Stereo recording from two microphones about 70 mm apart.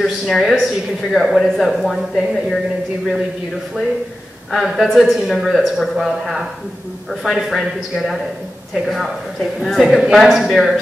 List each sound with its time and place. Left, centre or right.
0.0 s speech: centre
4.5 s speech: centre
4.8 s speech: centre
5.1 s speech: centre